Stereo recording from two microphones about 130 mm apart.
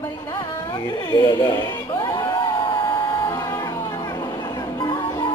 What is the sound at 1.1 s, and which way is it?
Speech, 30° left (ahead or behind).